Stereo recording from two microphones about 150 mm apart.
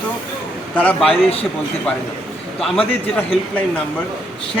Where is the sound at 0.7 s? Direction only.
5° left (ahead or behind).